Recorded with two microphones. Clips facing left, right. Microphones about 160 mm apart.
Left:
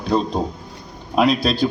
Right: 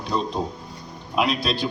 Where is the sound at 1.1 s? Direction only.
40° left (ahead or behind).